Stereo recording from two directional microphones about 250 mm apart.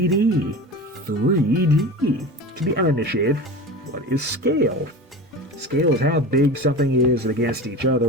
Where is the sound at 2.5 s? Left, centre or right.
Right.